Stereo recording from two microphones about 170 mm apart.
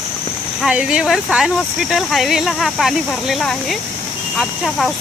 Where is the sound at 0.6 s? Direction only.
5° right (ahead or behind).